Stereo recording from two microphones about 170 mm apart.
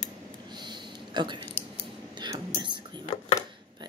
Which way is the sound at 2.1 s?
25° right (ahead or behind).